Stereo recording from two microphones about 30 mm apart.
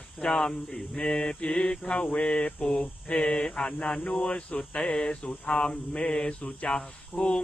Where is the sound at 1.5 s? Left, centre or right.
Left.